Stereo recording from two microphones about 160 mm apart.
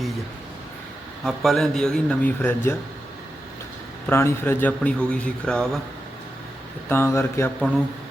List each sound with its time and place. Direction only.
1.2 s a man's voice: centre (ahead or behind)
4.1 s a man's voice: 15° left (ahead or behind)
6.8 s a man's voice: 15° left (ahead or behind)